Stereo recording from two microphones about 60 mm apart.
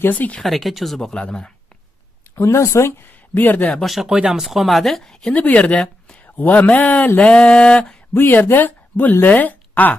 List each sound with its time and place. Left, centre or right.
0.1 s speech: left
0.4 s speech: centre
1.1 s a sound: centre
2.3 s speech: left
3.1 s speech: left
3.8 s speech: centre
5.3 s speech: left
6.2 s speech: left
7.2 s a sound: centre
8.2 s speech: left